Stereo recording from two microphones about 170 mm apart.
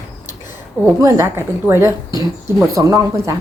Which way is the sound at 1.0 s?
15° right (ahead or behind).